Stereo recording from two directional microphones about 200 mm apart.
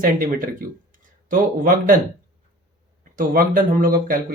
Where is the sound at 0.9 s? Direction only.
40° right (ahead or behind).